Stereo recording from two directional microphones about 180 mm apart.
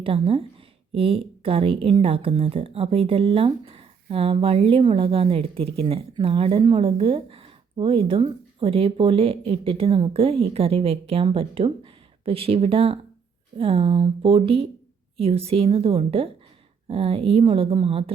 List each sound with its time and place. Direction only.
0.0 s a woman's voice: 30° right (ahead or behind)